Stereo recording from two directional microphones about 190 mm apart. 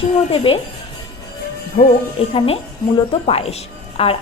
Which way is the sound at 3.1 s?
30° left (ahead or behind).